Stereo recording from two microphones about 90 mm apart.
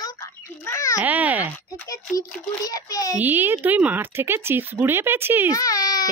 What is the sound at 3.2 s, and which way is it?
Speech, 20° right (ahead or behind).